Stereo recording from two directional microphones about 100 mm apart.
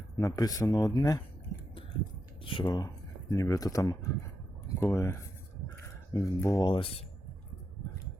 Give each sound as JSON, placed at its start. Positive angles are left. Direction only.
{"t": 0.2, "sound": "speech", "side_deg": 35}
{"t": 2.4, "sound": "speech", "side_deg": 60}
{"t": 2.6, "sound": "speech", "side_deg": 40}
{"t": 6.7, "sound": "speech", "side_deg": 55}